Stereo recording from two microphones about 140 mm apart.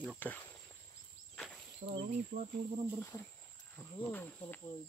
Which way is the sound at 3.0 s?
20° left (ahead or behind).